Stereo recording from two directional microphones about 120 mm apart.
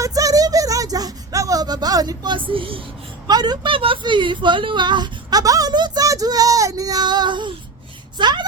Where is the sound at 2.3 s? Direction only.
45° right (ahead or behind).